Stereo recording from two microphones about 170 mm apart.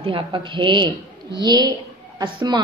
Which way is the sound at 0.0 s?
30° right (ahead or behind).